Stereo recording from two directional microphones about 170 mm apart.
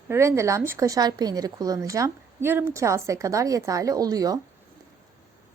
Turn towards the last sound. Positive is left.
turn(degrees=-20)  # may be behind; listen again after turning